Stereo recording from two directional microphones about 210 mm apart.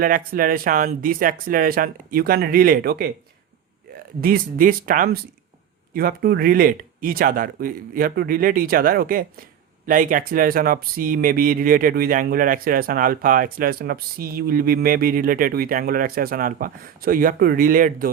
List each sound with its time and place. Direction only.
0.0 s speech: 40° right (ahead or behind)
4.2 s speech: 45° right (ahead or behind)